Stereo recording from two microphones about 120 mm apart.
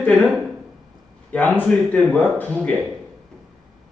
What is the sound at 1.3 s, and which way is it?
Speech, 15° left (ahead or behind).